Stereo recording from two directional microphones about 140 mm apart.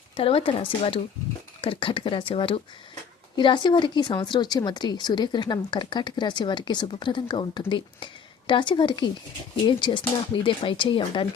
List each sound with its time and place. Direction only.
0.2 s a woman's voice: 40° left (ahead or behind)